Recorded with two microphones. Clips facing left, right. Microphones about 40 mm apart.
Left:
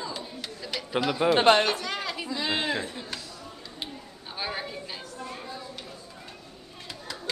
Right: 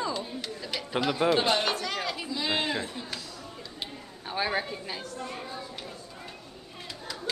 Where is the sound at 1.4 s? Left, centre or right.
Left.